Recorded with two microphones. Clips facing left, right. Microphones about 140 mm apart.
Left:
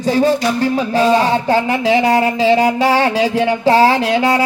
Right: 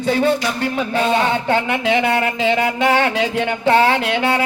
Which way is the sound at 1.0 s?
35° left (ahead or behind).